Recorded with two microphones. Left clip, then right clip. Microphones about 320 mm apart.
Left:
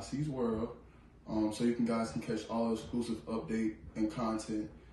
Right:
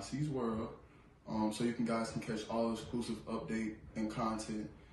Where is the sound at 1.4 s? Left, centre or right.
Centre.